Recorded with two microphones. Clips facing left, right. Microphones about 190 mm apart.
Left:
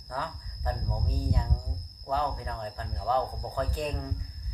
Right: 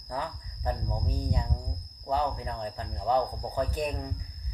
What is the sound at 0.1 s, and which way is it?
Speech, 15° right (ahead or behind).